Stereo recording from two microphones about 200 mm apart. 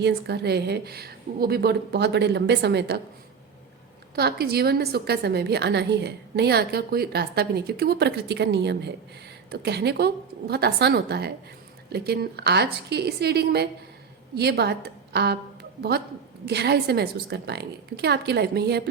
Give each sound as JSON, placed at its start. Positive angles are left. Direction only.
{"t": 0.0, "sound": "a woman's voice", "side_deg": -55}
{"t": 4.1, "sound": "a woman's voice", "side_deg": -50}